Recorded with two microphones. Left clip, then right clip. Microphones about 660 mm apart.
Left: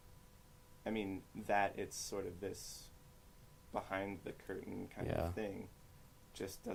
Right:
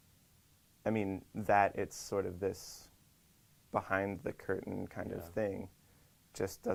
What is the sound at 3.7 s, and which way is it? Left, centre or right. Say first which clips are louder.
Speech: right 7 dB; right.